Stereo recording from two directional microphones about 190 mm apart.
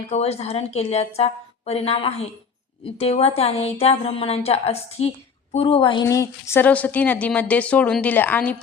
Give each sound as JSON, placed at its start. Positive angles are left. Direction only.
{"t": 0.1, "sound": "a woman's voice", "side_deg": 35}